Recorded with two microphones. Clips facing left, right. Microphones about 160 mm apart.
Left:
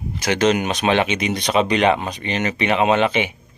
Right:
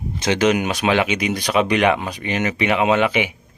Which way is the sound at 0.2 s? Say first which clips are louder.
Even; 15° right (ahead or behind).